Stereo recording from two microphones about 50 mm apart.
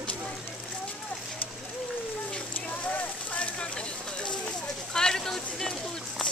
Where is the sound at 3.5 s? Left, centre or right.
Centre.